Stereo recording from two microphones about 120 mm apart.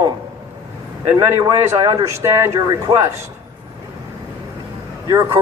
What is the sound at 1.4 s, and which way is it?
Speech, 30° right (ahead or behind).